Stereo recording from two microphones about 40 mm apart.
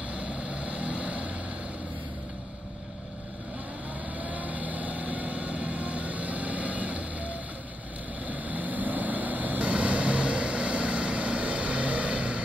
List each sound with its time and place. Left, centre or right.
0.1 s vehicle: right
4.2 s vehicle: right